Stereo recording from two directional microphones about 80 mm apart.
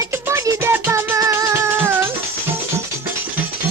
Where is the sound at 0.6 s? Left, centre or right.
Right.